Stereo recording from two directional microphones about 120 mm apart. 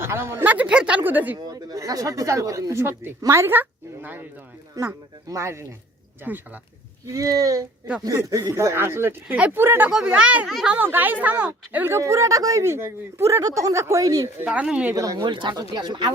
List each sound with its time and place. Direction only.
0.0 s speech: 20° right (ahead or behind)
1.4 s a woman's voice: 35° right (ahead or behind); by 4.3 s 15° right (ahead or behind)
4.8 s a woman's voice: 25° right (ahead or behind)
7.1 s a woman's voice: 30° right (ahead or behind); by 10.8 s 5° right (ahead or behind)
10.8 s a woman's voice: 15° right (ahead or behind)
14.4 s speech: 10° right (ahead or behind)
14.9 s a woman's voice: 30° right (ahead or behind)
15.3 s speech: 40° right (ahead or behind)